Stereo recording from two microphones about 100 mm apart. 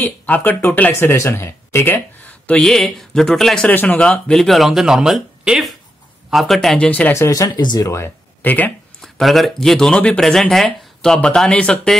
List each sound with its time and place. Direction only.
0.0 s speech: 20° left (ahead or behind); by 3.7 s 5° left (ahead or behind)
3.7 s speech: 15° left (ahead or behind)
4.3 s speech: centre (ahead or behind)
6.9 s speech: 15° left (ahead or behind)
7.2 s speech: 35° left (ahead or behind)
7.9 s speech: 20° left (ahead or behind)
9.0 s speech: centre (ahead or behind)